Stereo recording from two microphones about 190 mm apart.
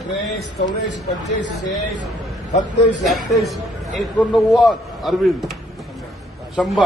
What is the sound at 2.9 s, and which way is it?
A man's voice, centre (ahead or behind).